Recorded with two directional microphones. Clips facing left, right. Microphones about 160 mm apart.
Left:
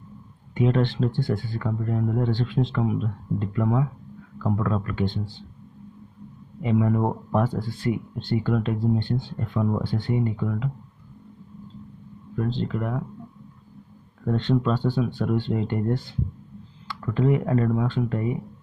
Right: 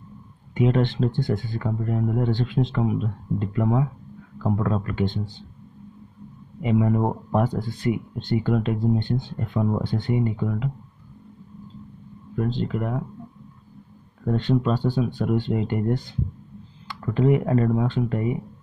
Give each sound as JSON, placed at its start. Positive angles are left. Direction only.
{"t": 0.6, "sound": "speech", "side_deg": -15}
{"t": 6.6, "sound": "speech", "side_deg": -15}
{"t": 12.4, "sound": "speech", "side_deg": -15}
{"t": 14.2, "sound": "speech", "side_deg": -10}